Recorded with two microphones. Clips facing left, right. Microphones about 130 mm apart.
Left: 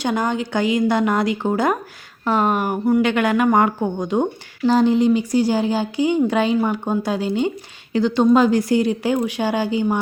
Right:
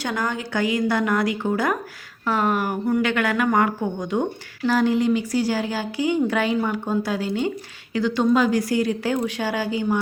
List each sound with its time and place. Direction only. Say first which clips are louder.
0.0 s speech: left 5 dB; 20° left (ahead or behind)